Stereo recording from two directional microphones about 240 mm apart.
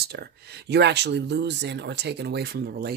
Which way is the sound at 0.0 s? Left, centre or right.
Right.